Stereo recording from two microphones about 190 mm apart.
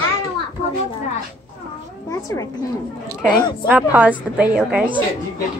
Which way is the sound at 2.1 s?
15° left (ahead or behind).